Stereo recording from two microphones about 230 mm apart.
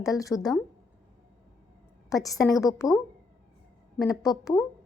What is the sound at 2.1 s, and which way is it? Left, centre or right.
Speech, centre.